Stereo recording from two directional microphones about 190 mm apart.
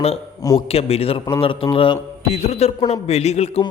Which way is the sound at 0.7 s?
30° left (ahead or behind).